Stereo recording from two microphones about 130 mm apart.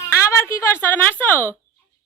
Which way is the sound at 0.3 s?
20° left (ahead or behind).